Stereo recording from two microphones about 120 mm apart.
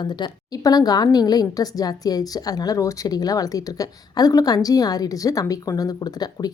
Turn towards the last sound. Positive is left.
turn(degrees=35)  # may be behind; listen again after turning